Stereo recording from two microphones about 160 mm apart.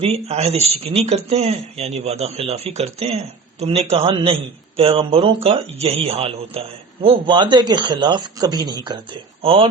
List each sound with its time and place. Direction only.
0.0 s speech: 40° right (ahead or behind)